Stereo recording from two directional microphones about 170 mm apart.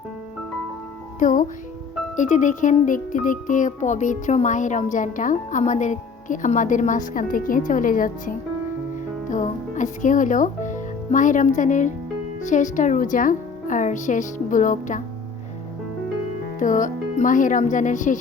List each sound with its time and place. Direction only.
1.2 s speech: 50° left (ahead or behind)
16.6 s speech: 50° left (ahead or behind)